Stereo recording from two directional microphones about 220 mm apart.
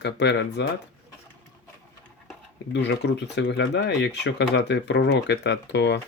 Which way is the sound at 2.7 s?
50° left (ahead or behind).